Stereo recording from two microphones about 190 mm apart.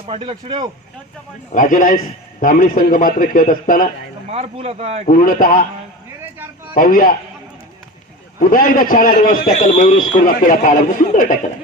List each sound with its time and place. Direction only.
0.0 s speech: 30° right (ahead or behind)
1.5 s a man's voice: 45° left (ahead or behind)
4.3 s speech: 35° right (ahead or behind)
5.0 s a man's voice: 50° left (ahead or behind)
6.7 s a man's voice: 50° left (ahead or behind)
8.4 s a man's voice: 45° left (ahead or behind)
9.6 s a man's voice: 30° left (ahead or behind); by 11.3 s 45° left (ahead or behind)